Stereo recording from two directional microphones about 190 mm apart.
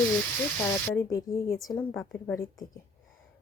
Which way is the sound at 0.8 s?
15° left (ahead or behind).